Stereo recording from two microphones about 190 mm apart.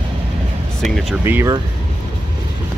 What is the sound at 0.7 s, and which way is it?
Speech, centre (ahead or behind).